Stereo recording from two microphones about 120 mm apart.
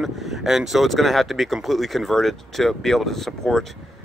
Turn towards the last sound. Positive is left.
turn(degrees=5)  # may be behind; listen again after turning